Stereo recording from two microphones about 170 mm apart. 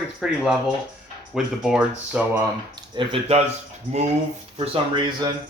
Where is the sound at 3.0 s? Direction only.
35° right (ahead or behind).